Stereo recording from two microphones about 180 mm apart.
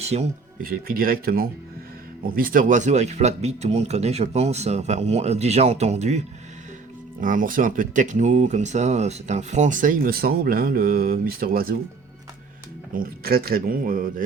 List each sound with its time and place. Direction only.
0.1 s speech: 35° right (ahead or behind)
0.6 s speech: 55° right (ahead or behind)
12.9 s speech: 55° right (ahead or behind)